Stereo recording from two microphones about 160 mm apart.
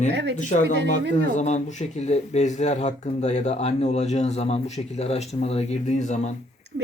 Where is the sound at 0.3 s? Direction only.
50° left (ahead or behind).